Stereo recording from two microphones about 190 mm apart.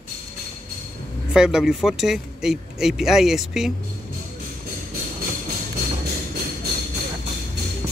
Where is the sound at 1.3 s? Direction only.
5° right (ahead or behind).